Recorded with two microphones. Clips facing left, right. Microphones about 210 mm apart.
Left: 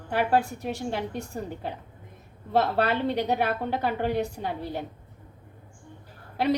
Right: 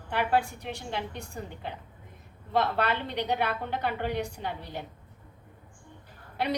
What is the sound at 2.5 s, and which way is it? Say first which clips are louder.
A woman's voice: left 3 dB; 40° left (ahead or behind).